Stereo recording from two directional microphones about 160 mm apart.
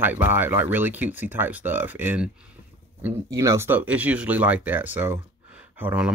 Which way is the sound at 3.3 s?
20° right (ahead or behind).